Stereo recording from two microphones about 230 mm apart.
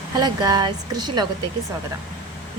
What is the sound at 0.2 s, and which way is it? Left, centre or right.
Speech, centre.